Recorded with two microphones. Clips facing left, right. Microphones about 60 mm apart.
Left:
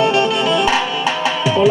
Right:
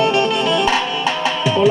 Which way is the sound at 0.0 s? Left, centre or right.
Centre.